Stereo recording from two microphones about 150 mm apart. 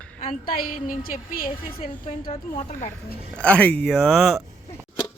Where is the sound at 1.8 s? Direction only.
45° left (ahead or behind).